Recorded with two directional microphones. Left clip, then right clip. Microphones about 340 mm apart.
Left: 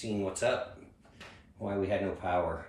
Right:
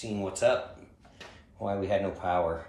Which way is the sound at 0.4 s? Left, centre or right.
Centre.